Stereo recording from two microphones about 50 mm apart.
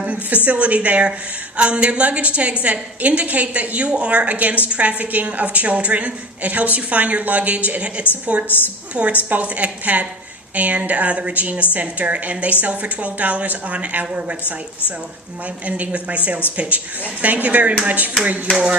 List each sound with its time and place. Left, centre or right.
0.0 s a sound: right
0.4 s a woman's voice: right
8.4 s a woman's voice: left
9.0 s a woman's voice: right
15.6 s a woman's voice: right
18.5 s a woman's voice: centre